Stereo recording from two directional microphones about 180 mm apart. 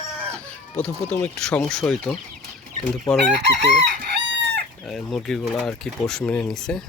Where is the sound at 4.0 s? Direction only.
70° right (ahead or behind).